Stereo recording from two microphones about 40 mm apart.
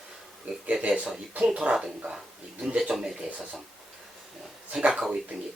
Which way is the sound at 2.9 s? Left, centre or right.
Centre.